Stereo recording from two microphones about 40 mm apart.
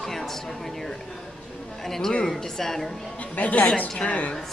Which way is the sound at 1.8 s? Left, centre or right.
Centre.